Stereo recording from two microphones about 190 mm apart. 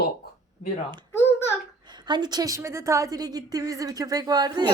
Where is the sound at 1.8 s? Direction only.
25° right (ahead or behind).